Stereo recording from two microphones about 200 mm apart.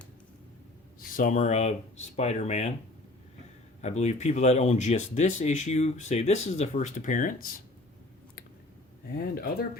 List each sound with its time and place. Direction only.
0.9 s speech: 40° left (ahead or behind)
3.8 s speech: 35° left (ahead or behind)
9.1 s speech: 50° left (ahead or behind)